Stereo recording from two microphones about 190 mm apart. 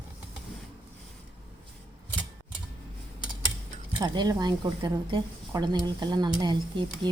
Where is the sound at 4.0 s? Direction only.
20° right (ahead or behind).